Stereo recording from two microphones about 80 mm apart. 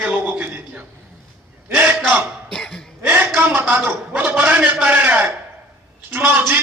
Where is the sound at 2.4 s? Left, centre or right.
Centre.